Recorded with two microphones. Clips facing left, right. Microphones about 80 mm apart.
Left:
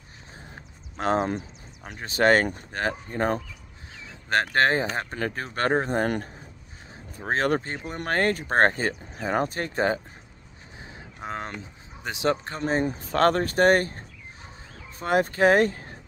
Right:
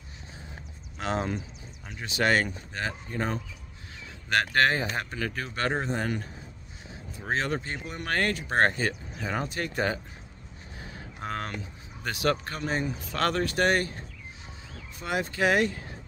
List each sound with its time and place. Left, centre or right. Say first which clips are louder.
0.9 s speech: left 5 dB; left
4.1 s speech: left 2 dB; left
6.9 s vehicle: left 3 dB; left
7.4 s speech: left 6 dB; left
10.8 s speech: even; centre; by 16.0 s left